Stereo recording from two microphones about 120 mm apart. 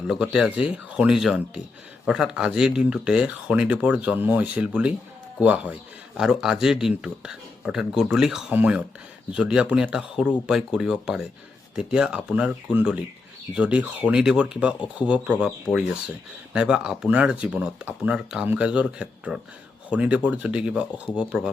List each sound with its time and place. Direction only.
0.1 s speech: 5° right (ahead or behind)